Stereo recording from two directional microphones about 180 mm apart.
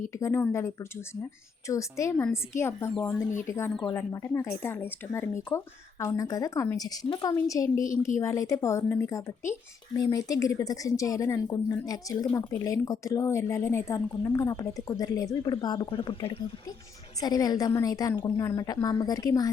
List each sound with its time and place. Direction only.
0.1 s a woman's voice: 15° left (ahead or behind)